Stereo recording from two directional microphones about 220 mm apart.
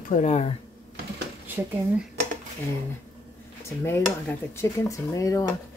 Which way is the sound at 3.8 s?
10° left (ahead or behind).